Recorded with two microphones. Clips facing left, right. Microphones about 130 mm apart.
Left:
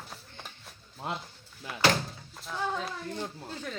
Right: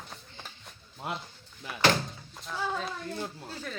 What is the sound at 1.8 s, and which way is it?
Door, centre (ahead or behind).